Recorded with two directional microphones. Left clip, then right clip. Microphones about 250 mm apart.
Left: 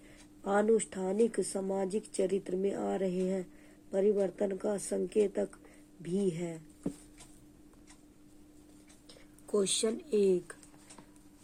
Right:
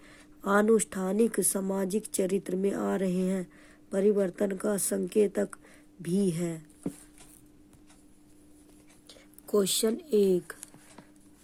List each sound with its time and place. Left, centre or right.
0.4 s speech: right
9.0 s speech: right